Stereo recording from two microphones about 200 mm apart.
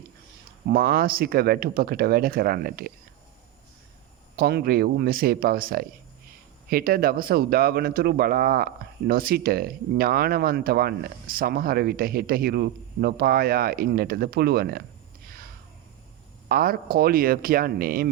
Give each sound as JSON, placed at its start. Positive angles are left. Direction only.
{"t": 0.7, "sound": "speech", "side_deg": -45}
{"t": 4.4, "sound": "speech", "side_deg": -50}
{"t": 16.5, "sound": "speech", "side_deg": -50}